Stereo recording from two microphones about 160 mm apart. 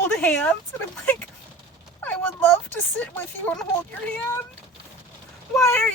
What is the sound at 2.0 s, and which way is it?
Speech, 10° left (ahead or behind).